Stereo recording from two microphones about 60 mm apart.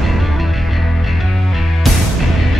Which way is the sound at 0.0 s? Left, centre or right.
Centre.